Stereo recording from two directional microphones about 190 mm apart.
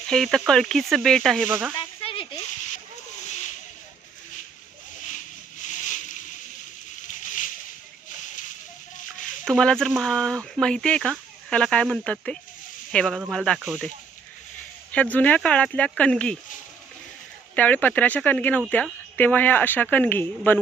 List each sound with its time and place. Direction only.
0.1 s speech: centre (ahead or behind)
1.5 s speech: 10° right (ahead or behind)
1.7 s a sound: 25° left (ahead or behind)
5.6 s a sound: 40° left (ahead or behind)
9.4 s speech: 5° left (ahead or behind)
14.9 s speech: 10° left (ahead or behind)
17.5 s speech: 10° left (ahead or behind)